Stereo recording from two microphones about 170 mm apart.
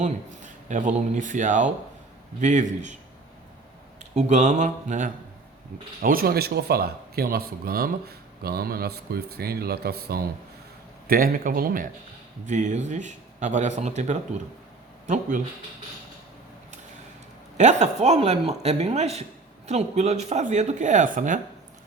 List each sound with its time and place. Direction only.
0.0 s speech: 45° right (ahead or behind)
4.1 s speech: 40° right (ahead or behind)
6.0 s a man's voice: 60° right (ahead or behind)
17.6 s speech: 40° right (ahead or behind)